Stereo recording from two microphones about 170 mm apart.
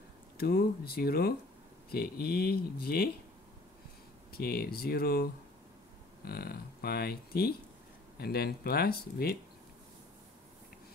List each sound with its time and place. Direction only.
0.4 s speech: 65° left (ahead or behind)
4.3 s speech: 65° left (ahead or behind)